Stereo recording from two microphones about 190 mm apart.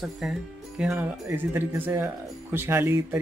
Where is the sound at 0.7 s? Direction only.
5° right (ahead or behind).